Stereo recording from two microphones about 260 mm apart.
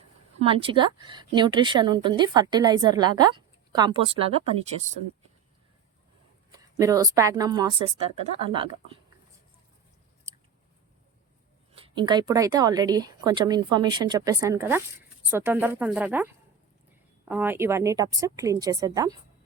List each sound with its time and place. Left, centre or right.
0.4 s a woman's voice: right
6.5 s a woman's voice: centre
11.7 s a woman's voice: centre